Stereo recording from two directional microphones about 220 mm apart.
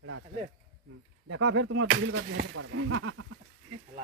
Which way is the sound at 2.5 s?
75° right (ahead or behind).